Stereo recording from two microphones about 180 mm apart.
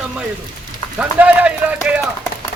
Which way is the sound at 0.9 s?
10° right (ahead or behind).